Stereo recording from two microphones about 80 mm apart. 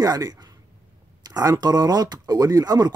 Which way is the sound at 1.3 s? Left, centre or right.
Right.